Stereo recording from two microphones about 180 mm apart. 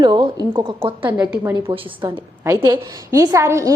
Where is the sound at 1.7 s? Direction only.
25° right (ahead or behind).